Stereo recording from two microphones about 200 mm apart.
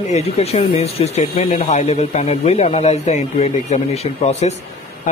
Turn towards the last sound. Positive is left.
turn(degrees=35)  # may be behind; listen again after turning